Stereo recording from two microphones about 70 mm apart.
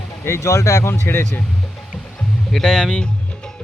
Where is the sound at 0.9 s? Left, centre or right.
Left.